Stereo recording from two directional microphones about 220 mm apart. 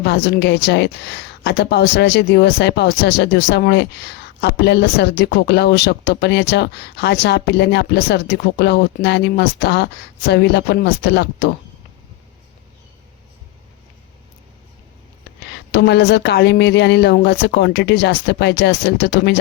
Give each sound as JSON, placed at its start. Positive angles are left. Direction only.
{"t": 0.3, "sound": "speech", "side_deg": 50}
{"t": 15.7, "sound": "speech", "side_deg": 50}